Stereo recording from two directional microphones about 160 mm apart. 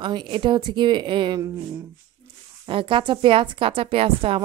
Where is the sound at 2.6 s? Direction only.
35° right (ahead or behind).